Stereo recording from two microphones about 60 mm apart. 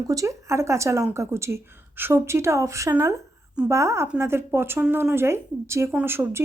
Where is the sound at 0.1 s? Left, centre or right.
Right.